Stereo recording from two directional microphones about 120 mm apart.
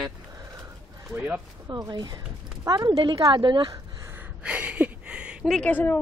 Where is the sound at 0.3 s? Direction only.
30° right (ahead or behind).